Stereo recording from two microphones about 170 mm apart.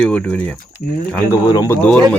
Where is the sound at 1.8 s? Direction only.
5° left (ahead or behind).